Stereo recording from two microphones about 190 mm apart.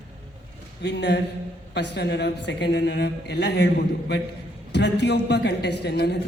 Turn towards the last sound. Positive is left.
turn(degrees=60)  # may be behind; listen again after turning